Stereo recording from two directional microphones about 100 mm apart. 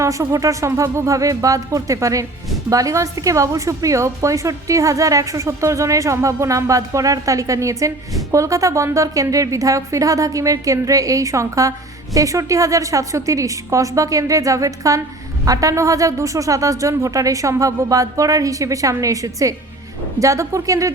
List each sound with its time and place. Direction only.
0.0 s speech: 30° right (ahead or behind)